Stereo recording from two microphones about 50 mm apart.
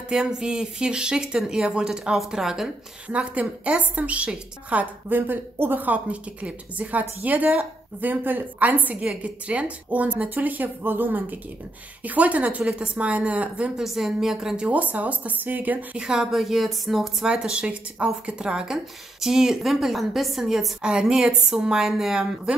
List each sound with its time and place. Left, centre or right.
0.1 s a woman's voice: centre
3.1 s a woman's voice: right
5.2 s a woman's voice: right
13.7 s a woman's voice: centre
14.7 s a woman's voice: right
16.0 s a woman's voice: centre
17.2 s a woman's voice: centre
20.8 s a woman's voice: centre